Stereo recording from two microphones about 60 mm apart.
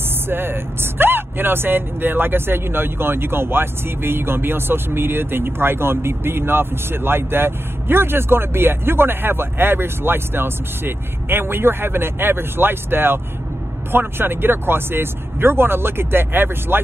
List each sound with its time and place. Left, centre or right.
0.3 s speech: right